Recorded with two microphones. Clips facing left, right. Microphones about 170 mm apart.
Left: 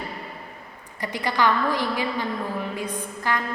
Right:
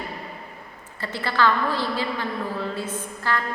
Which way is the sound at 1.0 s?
15° left (ahead or behind).